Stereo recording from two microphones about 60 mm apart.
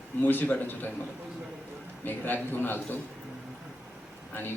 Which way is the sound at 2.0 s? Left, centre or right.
Left.